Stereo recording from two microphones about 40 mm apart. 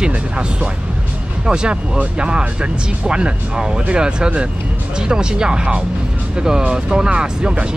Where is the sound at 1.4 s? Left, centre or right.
Right.